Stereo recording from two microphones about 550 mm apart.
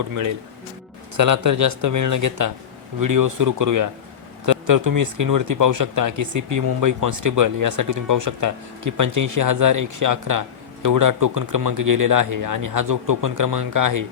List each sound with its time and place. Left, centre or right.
1.1 s speech: right